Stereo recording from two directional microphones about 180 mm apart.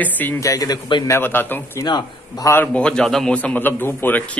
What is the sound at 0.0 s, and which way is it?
A man's voice, 10° left (ahead or behind).